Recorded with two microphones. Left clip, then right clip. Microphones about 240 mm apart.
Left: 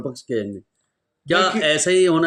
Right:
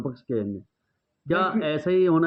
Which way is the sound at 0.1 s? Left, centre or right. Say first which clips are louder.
Left 4 dB; centre.